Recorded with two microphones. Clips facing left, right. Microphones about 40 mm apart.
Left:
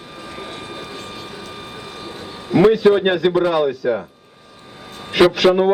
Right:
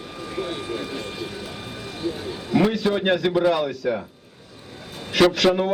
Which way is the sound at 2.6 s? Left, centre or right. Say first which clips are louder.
Left 10 dB; centre.